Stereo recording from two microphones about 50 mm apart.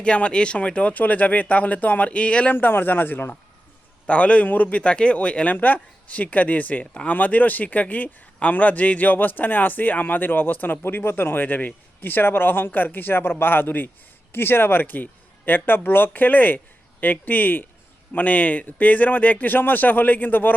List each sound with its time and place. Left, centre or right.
0.0 s speech: left
4.0 s a man's voice: left
5.5 s speech: left